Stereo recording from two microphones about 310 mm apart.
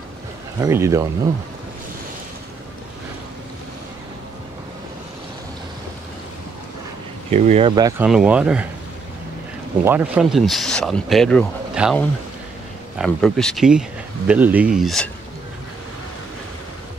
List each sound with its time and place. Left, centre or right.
0.6 s speech: centre
7.2 s speech: right; by 8.6 s centre
9.8 s speech: centre